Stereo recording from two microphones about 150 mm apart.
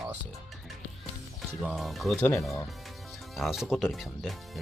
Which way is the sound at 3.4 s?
Centre (ahead or behind).